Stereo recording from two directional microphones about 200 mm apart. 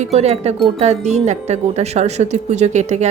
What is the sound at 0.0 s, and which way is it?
Speech, 35° right (ahead or behind).